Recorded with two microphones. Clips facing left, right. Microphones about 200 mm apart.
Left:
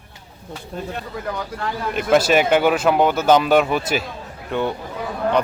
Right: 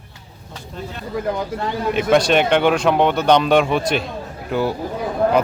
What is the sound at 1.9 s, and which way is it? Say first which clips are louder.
A man's voice: even; centre (ahead or behind).